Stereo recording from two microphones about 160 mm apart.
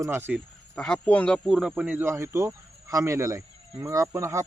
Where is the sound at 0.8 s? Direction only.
5° left (ahead or behind).